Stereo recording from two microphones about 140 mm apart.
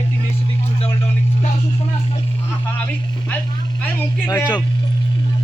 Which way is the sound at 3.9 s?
20° left (ahead or behind).